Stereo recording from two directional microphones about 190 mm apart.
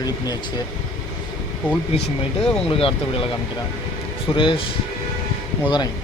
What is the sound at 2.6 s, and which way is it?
Speech, 30° left (ahead or behind).